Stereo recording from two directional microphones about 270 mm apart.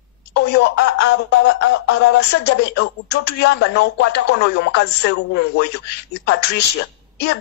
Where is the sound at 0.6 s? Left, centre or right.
Left.